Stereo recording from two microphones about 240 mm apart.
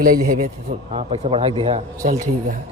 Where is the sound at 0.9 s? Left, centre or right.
Right.